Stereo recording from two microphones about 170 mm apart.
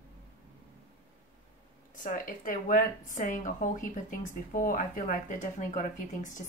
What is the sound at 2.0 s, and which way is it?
A woman's voice, 50° left (ahead or behind).